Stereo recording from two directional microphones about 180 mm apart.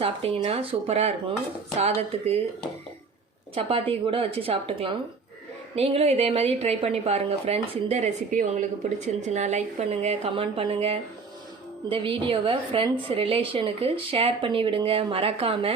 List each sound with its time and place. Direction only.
0.0 s a woman's voice: 35° right (ahead or behind)
3.5 s a woman's voice: 30° right (ahead or behind)